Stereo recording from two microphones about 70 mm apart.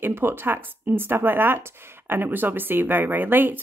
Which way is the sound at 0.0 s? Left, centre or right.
Right.